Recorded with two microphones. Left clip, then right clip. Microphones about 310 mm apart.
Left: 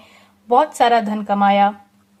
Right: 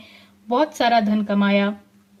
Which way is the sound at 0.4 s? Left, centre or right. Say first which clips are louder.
Left 5 dB; left.